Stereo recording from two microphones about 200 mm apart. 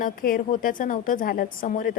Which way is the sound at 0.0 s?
45° left (ahead or behind).